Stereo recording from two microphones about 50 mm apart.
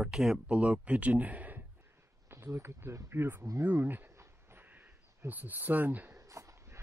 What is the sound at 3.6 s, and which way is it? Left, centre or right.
Speech, right.